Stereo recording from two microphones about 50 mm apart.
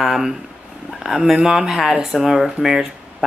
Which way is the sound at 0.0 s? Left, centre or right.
Centre.